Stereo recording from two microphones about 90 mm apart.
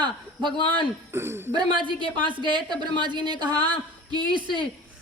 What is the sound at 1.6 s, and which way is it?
A woman's voice, 60° right (ahead or behind).